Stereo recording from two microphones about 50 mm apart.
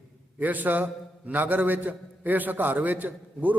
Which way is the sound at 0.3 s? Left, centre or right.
Right.